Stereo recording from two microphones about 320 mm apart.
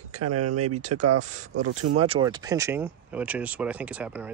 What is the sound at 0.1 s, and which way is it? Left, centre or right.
Speech, right.